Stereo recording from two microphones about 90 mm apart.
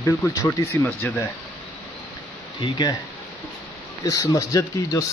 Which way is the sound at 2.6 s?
55° left (ahead or behind).